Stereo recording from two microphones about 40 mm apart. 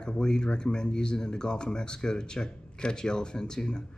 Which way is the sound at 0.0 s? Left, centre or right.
Centre.